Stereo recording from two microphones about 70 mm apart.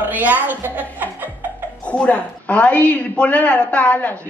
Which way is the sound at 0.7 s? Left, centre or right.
Right.